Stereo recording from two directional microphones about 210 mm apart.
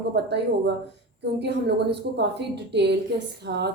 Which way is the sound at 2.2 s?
55° right (ahead or behind).